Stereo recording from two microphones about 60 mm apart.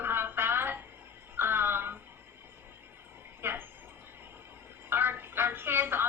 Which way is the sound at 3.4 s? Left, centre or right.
Right.